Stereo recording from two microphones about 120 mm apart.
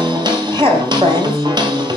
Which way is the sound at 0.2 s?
40° right (ahead or behind).